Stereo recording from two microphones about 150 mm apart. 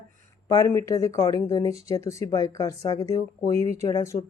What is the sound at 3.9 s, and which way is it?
Speech, 20° left (ahead or behind).